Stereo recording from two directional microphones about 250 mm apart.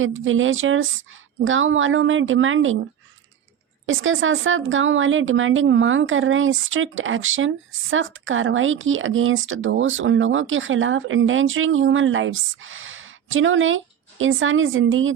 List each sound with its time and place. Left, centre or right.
0.0 s speech: right
3.8 s speech: right